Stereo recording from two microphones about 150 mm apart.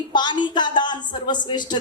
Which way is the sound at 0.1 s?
30° left (ahead or behind).